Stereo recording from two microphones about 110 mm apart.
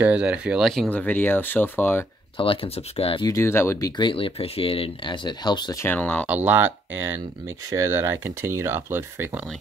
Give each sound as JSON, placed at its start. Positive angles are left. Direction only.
{"t": 0.0, "sound": "speech", "side_deg": -10}
{"t": 0.9, "sound": "speech", "side_deg": 15}
{"t": 2.3, "sound": "speech", "side_deg": 55}
{"t": 3.3, "sound": "speech", "side_deg": 25}
{"t": 3.9, "sound": "speech", "side_deg": 50}
{"t": 5.8, "sound": "speech", "side_deg": 15}
{"t": 6.2, "sound": "speech", "side_deg": -15}